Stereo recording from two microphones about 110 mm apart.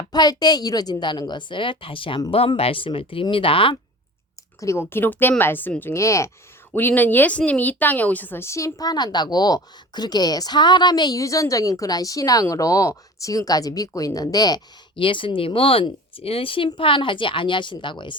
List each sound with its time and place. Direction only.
0.1 s a woman's voice: 40° left (ahead or behind); by 3.8 s 55° left (ahead or behind)
4.6 s a woman's voice: 25° left (ahead or behind)
6.7 s a woman's voice: 15° left (ahead or behind); by 14.6 s 35° left (ahead or behind)
14.9 s a woman's voice: 50° left (ahead or behind)